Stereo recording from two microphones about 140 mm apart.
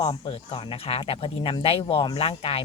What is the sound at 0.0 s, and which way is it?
Speech, 35° left (ahead or behind).